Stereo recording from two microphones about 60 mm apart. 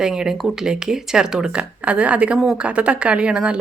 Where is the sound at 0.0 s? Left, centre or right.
Centre.